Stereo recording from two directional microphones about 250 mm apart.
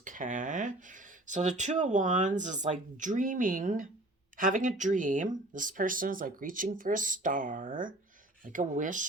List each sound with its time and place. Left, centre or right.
0.0 s speech: right